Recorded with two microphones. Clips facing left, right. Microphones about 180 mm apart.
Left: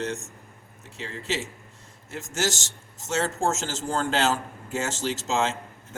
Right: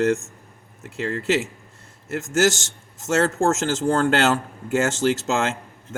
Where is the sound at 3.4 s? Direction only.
55° right (ahead or behind).